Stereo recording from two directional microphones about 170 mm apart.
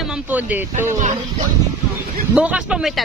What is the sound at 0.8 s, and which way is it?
Speech, 45° right (ahead or behind).